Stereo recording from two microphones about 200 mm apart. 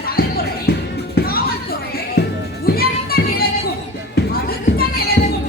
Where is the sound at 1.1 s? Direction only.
50° left (ahead or behind).